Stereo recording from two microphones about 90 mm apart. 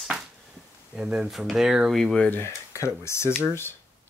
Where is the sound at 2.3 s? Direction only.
25° left (ahead or behind).